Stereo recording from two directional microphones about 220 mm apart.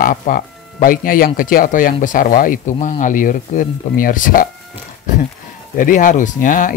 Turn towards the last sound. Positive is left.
turn(degrees=35)  # may be behind; listen again after turning